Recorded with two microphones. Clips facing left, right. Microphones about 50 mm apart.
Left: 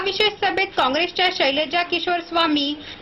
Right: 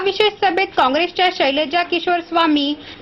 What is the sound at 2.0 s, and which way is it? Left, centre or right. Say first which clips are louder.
Speech: right 4 dB; right.